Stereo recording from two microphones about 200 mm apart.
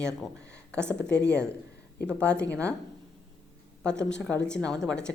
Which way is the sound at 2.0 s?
5° left (ahead or behind).